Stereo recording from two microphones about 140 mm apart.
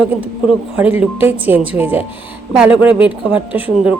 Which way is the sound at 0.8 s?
10° right (ahead or behind).